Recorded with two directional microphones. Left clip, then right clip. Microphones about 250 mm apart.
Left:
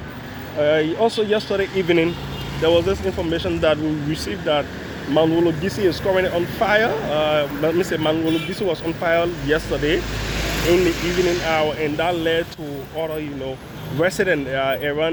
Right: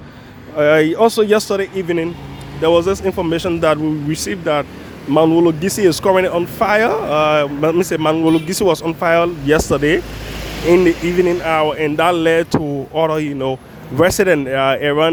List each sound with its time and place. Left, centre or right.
0.6 s speech: right
1.5 s speech: centre
2.6 s speech: right